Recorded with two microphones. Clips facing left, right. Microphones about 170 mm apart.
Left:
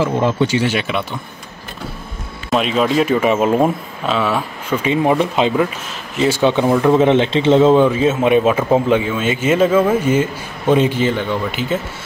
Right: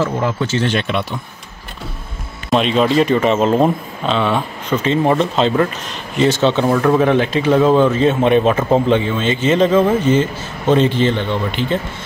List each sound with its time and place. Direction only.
0.2 s speech: 25° left (ahead or behind)
0.5 s speech: 10° left (ahead or behind)
2.5 s speech: 5° left (ahead or behind)
8.0 s speech: 5° left (ahead or behind)